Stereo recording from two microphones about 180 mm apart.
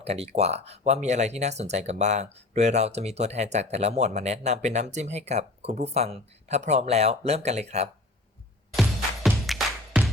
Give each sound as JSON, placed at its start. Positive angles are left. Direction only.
{"t": 0.0, "sound": "speech", "side_deg": -35}
{"t": 8.7, "sound": "music", "side_deg": 0}